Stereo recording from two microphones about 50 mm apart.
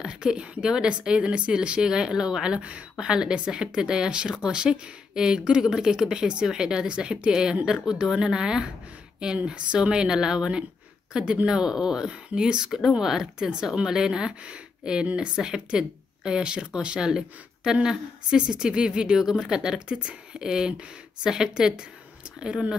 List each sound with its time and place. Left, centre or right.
0.0 s speech: centre